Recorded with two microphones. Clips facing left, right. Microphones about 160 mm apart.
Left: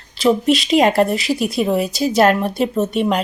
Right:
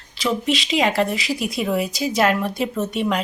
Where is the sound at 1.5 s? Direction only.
30° left (ahead or behind).